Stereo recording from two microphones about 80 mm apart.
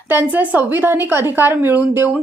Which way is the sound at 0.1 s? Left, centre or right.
Right.